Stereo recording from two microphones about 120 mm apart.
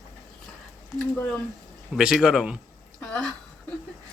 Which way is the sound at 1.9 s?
5° right (ahead or behind).